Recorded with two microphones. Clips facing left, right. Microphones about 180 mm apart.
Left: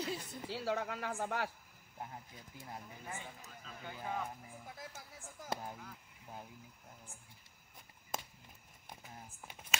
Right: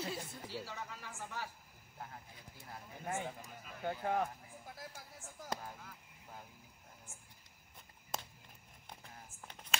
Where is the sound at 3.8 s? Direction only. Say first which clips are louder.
Right 6 dB; 60° right (ahead or behind).